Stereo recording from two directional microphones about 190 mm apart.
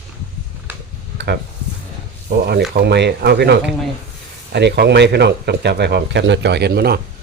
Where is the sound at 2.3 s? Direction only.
60° right (ahead or behind).